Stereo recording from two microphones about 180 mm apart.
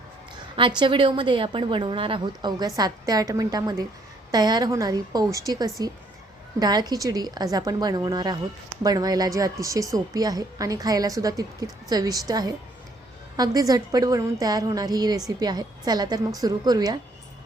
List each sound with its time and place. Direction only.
0.8 s a woman's voice: 30° right (ahead or behind)